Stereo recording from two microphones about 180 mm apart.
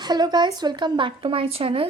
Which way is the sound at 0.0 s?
25° right (ahead or behind).